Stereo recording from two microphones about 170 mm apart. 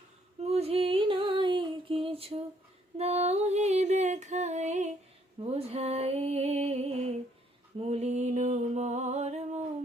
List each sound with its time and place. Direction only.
0.3 s music: 40° right (ahead or behind)
5.4 s a sound: 35° right (ahead or behind)
7.8 s music: 40° right (ahead or behind)